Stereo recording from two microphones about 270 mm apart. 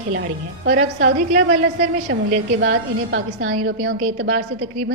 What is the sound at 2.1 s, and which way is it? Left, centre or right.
A woman's voice, right.